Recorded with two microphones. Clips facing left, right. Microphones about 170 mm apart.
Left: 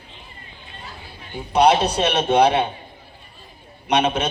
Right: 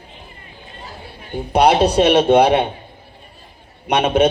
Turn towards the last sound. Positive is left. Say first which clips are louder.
# right 5 dB
turn(degrees=-55)  # may be behind; listen again after turning